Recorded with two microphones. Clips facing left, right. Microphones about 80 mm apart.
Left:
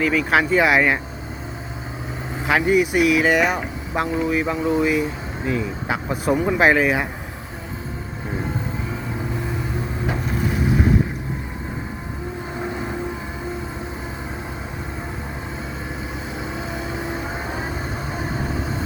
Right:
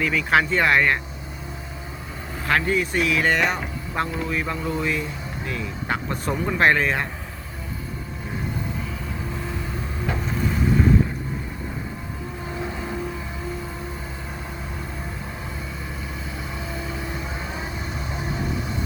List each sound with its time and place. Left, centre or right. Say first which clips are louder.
0.0 s speech: left 2 dB; centre
2.5 s speech: left 4 dB; centre
10.1 s boat: left 1 dB; centre
16.4 s vehicle: left 4 dB; left